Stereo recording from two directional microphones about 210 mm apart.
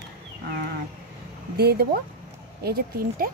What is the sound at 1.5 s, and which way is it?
Speech, 50° right (ahead or behind).